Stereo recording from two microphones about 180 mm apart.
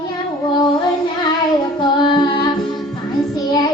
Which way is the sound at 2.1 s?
25° left (ahead or behind).